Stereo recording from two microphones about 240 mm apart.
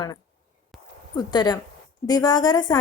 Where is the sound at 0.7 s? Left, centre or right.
Centre.